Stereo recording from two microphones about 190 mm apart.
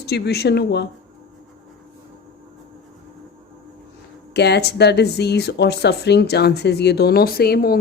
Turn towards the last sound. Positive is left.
turn(degrees=55)  # may be behind; listen again after turning